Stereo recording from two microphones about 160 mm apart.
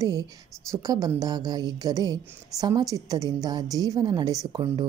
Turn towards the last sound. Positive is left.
turn(degrees=-30)  # may be behind; listen again after turning